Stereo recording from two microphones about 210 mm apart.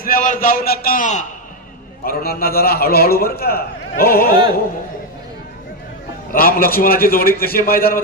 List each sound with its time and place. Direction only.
0.0 s a man's voice: 40° left (ahead or behind)
6.3 s a man's voice: 45° left (ahead or behind)